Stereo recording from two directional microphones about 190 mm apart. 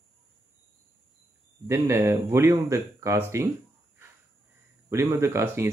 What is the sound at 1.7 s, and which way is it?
Speech, 15° right (ahead or behind).